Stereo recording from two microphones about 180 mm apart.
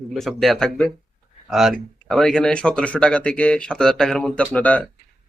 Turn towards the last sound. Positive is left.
turn(degrees=10)  # may be behind; listen again after turning